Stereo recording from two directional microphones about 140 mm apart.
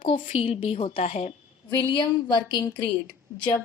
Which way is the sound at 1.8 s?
30° left (ahead or behind).